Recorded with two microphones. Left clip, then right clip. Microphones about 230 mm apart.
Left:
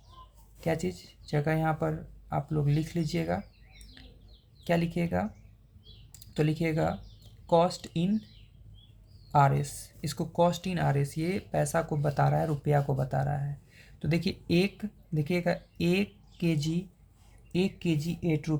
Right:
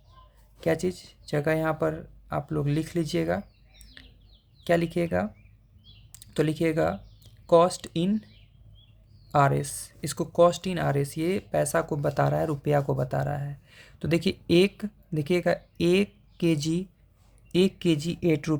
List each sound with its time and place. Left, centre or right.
0.6 s speech: right
4.0 s bird: right
4.6 s speech: right
9.3 s speech: right